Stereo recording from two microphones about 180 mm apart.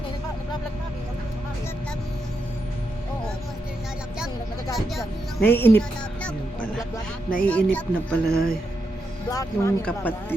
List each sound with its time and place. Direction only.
4.9 s speech: 10° left (ahead or behind)
7.4 s speech: 10° left (ahead or behind)
9.3 s speech: 20° left (ahead or behind)